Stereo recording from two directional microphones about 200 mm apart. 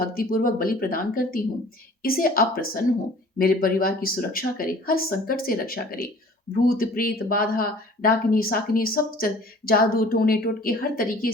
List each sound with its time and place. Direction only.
0.0 s speech: 45° left (ahead or behind)